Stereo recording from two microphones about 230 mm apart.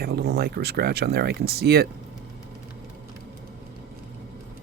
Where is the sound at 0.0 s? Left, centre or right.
Right.